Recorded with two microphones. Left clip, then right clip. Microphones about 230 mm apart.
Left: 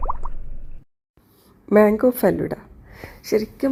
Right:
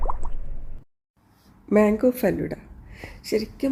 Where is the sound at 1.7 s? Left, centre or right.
Centre.